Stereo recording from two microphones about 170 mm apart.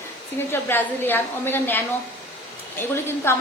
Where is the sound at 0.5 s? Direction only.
10° left (ahead or behind).